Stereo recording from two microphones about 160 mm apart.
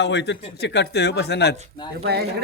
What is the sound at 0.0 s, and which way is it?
A man's voice, 90° left.